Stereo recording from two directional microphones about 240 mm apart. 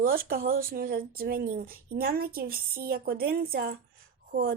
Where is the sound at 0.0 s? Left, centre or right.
Right.